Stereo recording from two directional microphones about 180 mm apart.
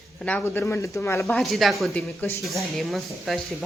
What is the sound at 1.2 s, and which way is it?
Speech, centre (ahead or behind).